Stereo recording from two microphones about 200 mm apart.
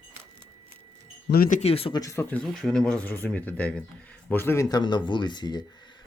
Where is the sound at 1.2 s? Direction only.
50° left (ahead or behind).